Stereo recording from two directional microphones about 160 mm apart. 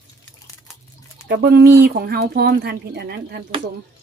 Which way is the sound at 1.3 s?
90° right.